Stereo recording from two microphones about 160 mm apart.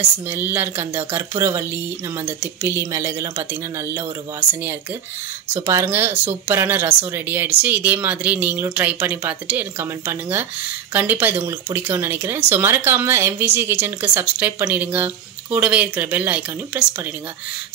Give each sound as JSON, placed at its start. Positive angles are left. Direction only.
{"t": 0.3, "sound": "speech", "side_deg": -15}